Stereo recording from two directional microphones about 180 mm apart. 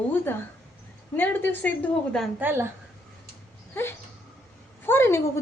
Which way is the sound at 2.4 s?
10° right (ahead or behind).